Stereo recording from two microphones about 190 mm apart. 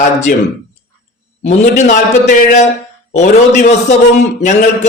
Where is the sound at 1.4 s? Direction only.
35° left (ahead or behind).